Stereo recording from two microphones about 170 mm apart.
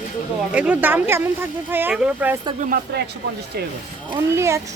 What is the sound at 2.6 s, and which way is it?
Speech, 65° right (ahead or behind).